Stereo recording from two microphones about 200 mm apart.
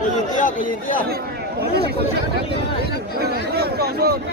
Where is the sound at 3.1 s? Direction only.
55° right (ahead or behind).